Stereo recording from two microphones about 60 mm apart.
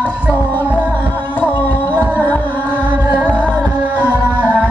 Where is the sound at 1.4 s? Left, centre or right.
Left.